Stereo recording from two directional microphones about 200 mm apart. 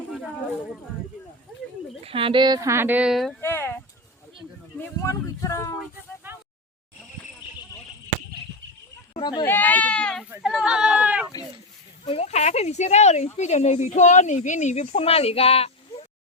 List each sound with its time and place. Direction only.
2.0 s speech: 25° right (ahead or behind); by 3.3 s centre (ahead or behind)
3.4 s a sound: 10° left (ahead or behind)
4.8 s speech: 15° left (ahead or behind)
9.1 s speech: 20° left (ahead or behind)
9.5 s speech: 10° left (ahead or behind)
10.2 s speech: 5° right (ahead or behind)
12.0 s speech: 30° left (ahead or behind)